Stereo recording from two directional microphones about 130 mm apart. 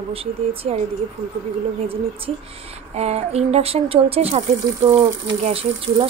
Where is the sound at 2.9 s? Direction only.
55° right (ahead or behind).